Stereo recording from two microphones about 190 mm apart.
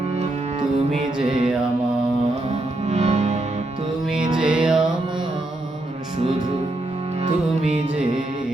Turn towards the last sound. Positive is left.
turn(degrees=-35)  # may be behind; listen again after turning